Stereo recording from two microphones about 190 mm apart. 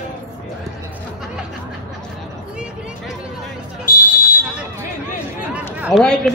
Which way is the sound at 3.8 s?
45° left (ahead or behind).